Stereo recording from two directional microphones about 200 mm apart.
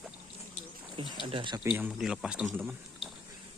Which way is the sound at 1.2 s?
25° right (ahead or behind).